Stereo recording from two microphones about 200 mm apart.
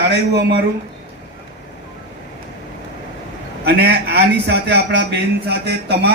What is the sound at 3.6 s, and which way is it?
Speech, 55° right (ahead or behind).